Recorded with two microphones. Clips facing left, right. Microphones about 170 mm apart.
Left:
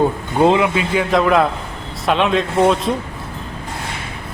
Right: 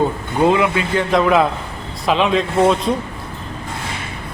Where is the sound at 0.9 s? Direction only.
Centre (ahead or behind).